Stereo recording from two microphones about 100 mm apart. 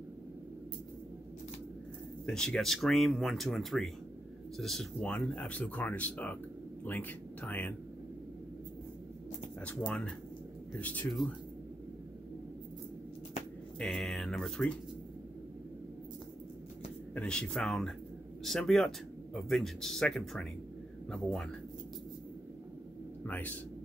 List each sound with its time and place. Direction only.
2.2 s speech: 5° left (ahead or behind)
9.7 s speech: 15° left (ahead or behind)
13.7 s speech: 5° left (ahead or behind)
17.1 s speech: 10° left (ahead or behind)
23.2 s speech: 15° left (ahead or behind)